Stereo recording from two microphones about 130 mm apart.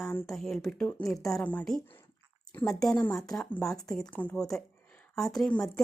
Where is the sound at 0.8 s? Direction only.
15° left (ahead or behind).